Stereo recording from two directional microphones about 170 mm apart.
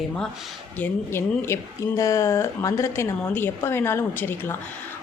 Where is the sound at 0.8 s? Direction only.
15° left (ahead or behind).